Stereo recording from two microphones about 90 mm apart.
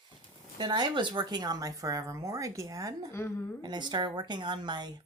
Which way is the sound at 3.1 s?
25° left (ahead or behind).